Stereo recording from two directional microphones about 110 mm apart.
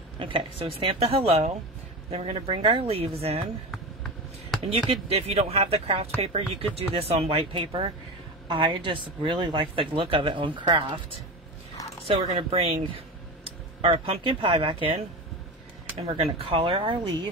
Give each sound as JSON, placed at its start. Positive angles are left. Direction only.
{"t": 0.2, "sound": "speech", "side_deg": -50}
{"t": 5.0, "sound": "speech", "side_deg": -65}
{"t": 12.1, "sound": "speech", "side_deg": -60}
{"t": 16.0, "sound": "speech", "side_deg": -60}